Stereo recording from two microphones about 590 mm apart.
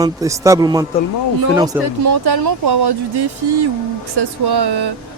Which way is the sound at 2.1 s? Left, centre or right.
Right.